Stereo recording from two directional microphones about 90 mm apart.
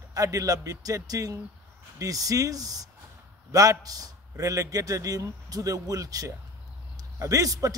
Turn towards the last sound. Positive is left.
turn(degrees=-40)  # may be behind; listen again after turning